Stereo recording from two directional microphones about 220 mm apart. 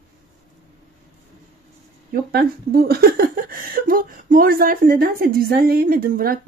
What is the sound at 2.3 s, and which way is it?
A woman's voice, 45° right (ahead or behind).